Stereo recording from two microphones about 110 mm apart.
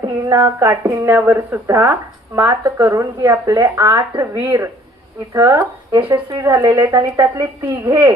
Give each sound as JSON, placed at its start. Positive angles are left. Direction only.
{"t": 0.0, "sound": "a woman's voice", "side_deg": -35}